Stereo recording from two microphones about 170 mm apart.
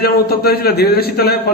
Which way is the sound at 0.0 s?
65° left (ahead or behind).